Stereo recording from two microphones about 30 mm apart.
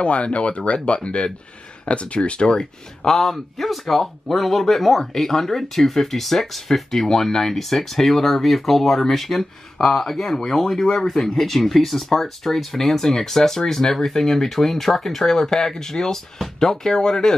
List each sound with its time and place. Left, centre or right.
0.0 s speech: left
2.4 s speech: left
3.1 s speech: centre
10.2 s speech: left
10.5 s speech: centre